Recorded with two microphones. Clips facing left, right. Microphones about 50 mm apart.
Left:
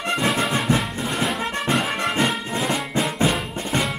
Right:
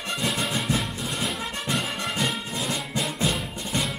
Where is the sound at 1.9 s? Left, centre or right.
Left.